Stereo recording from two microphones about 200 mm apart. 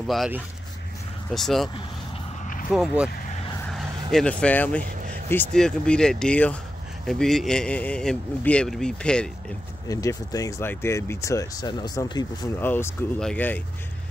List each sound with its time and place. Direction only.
0.0 s a man's voice: centre (ahead or behind)
2.7 s a man's voice: 5° right (ahead or behind)
4.1 s a man's voice: 5° left (ahead or behind)
9.8 s speech: 15° left (ahead or behind)